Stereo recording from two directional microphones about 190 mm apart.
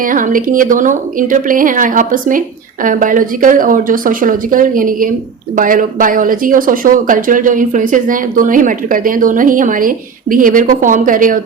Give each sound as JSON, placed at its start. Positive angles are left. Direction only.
{"t": 0.0, "sound": "speech", "side_deg": -45}